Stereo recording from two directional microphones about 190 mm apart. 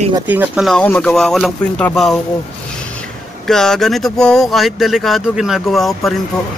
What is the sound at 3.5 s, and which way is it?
Speech, centre (ahead or behind).